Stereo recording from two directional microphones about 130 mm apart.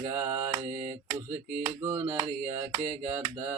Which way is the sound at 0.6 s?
60° right (ahead or behind).